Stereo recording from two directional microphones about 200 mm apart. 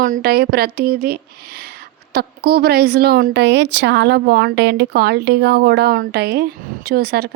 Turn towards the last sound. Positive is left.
turn(degrees=-50)  # may be behind; listen again after turning